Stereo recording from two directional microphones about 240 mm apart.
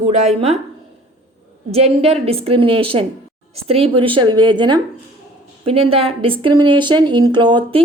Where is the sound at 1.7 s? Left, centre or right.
Right.